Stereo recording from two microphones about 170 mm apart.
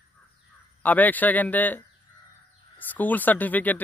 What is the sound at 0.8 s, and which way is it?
A man's voice, 10° left (ahead or behind).